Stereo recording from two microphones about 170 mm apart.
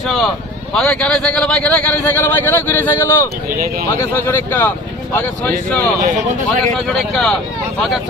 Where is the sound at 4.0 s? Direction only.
15° left (ahead or behind).